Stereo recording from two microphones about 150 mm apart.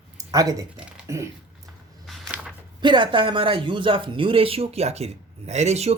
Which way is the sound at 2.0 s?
Centre (ahead or behind).